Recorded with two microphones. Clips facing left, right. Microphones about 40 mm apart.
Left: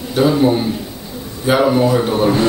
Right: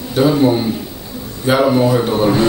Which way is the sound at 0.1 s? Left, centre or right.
Centre.